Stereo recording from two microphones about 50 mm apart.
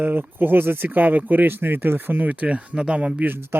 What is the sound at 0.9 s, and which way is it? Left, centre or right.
Speech, right.